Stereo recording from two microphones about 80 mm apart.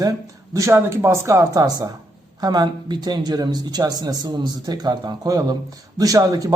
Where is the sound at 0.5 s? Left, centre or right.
Right.